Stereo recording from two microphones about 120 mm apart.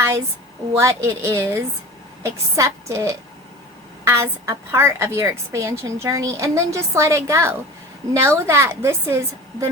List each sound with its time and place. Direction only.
0.8 s a woman's voice: 25° right (ahead or behind)